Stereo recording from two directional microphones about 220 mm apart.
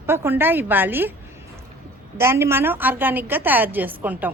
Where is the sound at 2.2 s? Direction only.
10° right (ahead or behind).